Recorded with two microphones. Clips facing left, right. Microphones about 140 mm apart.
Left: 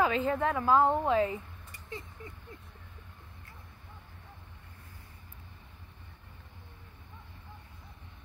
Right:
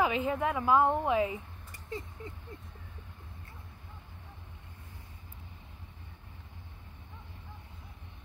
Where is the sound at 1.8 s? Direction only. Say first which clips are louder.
Right 3 dB; 35° right (ahead or behind).